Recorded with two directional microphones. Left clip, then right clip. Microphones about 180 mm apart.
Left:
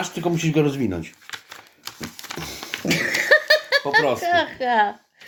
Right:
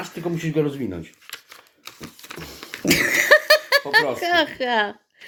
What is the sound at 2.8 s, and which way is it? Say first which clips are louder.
Laughter: right 3 dB; 40° right (ahead or behind).